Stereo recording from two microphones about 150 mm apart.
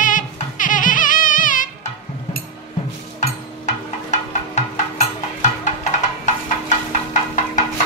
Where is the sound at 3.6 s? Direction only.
50° left (ahead or behind).